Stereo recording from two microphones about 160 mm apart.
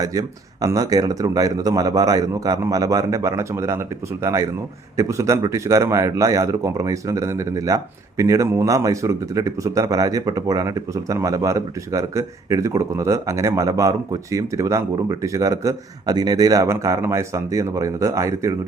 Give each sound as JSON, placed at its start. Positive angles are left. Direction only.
{"t": 0.0, "sound": "speech", "side_deg": -20}